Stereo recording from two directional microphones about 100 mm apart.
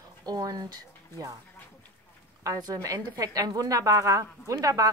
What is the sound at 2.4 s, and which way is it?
Speech, 35° right (ahead or behind).